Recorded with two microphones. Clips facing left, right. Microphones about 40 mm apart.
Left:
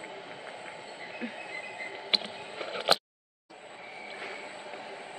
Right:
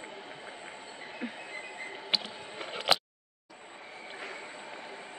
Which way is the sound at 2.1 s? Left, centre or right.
Left.